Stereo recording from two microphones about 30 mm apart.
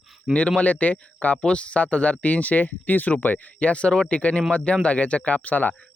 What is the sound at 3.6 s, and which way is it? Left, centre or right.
Speech, left.